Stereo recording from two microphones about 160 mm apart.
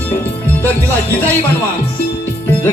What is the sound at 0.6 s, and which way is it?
Music, 10° left (ahead or behind).